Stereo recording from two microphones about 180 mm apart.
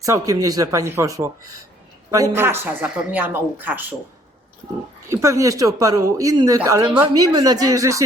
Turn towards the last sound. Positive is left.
turn(degrees=-20)  # may be behind; listen again after turning